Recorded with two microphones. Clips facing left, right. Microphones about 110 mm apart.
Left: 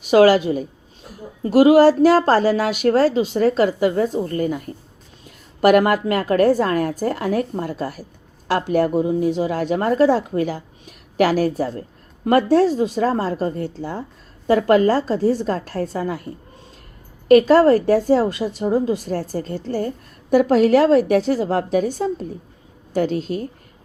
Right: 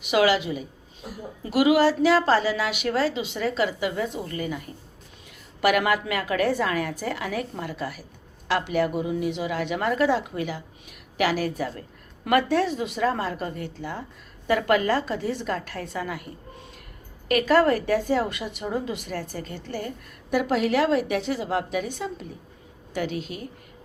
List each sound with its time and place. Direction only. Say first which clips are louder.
0.0 s a woman's voice: left 8 dB; 40° left (ahead or behind)